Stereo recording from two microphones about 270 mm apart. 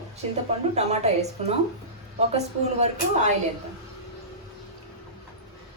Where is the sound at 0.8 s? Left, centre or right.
Right.